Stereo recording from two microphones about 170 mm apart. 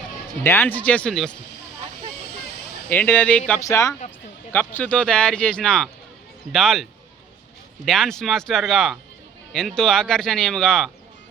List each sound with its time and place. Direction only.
0.4 s speech: 15° left (ahead or behind)
2.9 s speech: 10° left (ahead or behind)
3.6 s speech: 20° left (ahead or behind); by 6.8 s centre (ahead or behind)
7.9 s speech: centre (ahead or behind)